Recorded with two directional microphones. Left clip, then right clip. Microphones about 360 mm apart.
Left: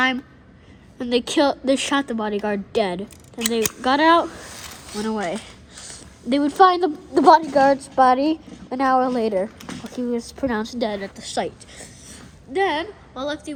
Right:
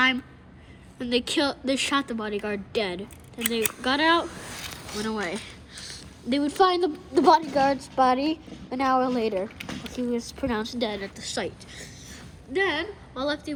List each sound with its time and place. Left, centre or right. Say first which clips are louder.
0.9 s a woman's voice: left 5 dB; left